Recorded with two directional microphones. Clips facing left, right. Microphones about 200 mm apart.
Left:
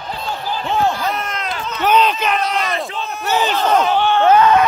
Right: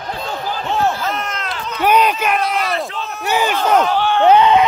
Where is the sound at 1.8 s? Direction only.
10° right (ahead or behind).